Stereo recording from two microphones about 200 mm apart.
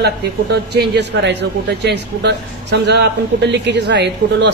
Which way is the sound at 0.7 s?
60° right (ahead or behind).